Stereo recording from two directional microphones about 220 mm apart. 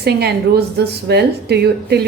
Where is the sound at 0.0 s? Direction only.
50° right (ahead or behind).